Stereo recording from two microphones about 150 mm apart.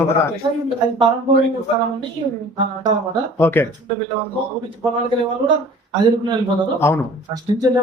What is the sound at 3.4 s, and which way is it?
Speech, 15° left (ahead or behind).